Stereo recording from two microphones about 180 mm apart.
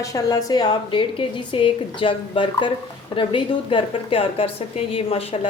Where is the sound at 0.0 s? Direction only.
20° left (ahead or behind).